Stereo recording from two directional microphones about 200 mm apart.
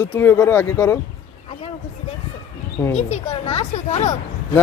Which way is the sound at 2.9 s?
30° left (ahead or behind).